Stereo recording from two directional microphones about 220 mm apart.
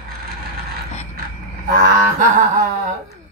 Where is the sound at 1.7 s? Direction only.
40° right (ahead or behind).